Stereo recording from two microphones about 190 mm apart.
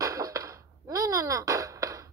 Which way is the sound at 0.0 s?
15° right (ahead or behind).